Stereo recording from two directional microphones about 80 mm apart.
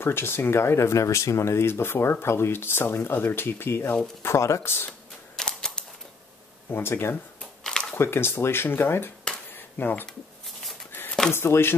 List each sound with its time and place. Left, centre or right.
0.0 s speech: left
5.3 s typewriter: centre
6.7 s speech: left
7.6 s a sound: centre
7.9 s speech: left
11.3 s speech: left